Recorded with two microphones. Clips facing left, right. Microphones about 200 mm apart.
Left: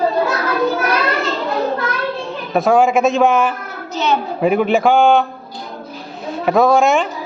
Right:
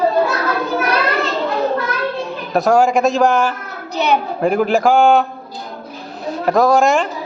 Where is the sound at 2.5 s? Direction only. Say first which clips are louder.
Even; centre (ahead or behind).